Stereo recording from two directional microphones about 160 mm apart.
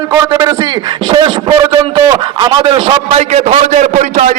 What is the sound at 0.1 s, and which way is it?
Speech, 20° right (ahead or behind).